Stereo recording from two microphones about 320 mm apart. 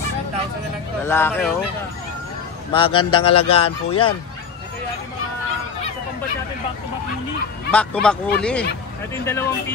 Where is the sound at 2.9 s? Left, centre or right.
Left.